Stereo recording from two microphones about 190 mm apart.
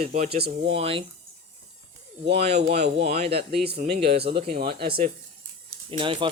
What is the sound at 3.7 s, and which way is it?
Speech, 55° right (ahead or behind).